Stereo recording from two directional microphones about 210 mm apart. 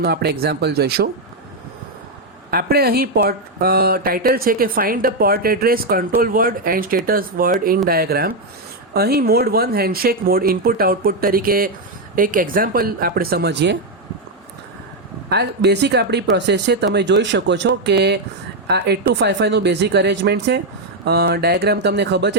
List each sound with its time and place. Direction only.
0.0 s speech: 50° right (ahead or behind)
2.5 s speech: 45° right (ahead or behind)
15.3 s speech: 50° right (ahead or behind)